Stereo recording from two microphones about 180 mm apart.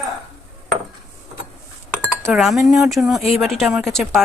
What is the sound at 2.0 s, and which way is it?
Chink, 15° right (ahead or behind).